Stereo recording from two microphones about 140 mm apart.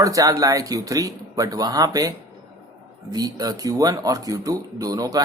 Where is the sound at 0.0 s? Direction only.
25° right (ahead or behind).